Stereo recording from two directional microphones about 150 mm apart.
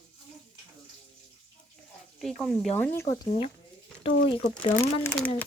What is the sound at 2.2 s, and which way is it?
Speech, 5° left (ahead or behind).